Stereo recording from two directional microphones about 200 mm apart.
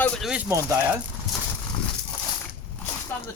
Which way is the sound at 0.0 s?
Centre (ahead or behind).